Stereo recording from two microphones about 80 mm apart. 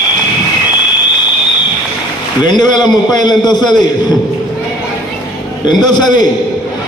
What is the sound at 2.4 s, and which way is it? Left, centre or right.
A man's voice, left.